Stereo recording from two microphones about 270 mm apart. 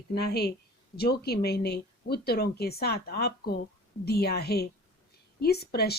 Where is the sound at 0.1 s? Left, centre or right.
Left.